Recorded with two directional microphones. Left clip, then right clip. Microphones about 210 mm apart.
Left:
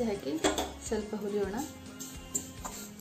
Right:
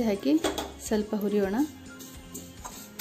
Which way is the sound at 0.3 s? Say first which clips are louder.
Right 4 dB; 45° right (ahead or behind).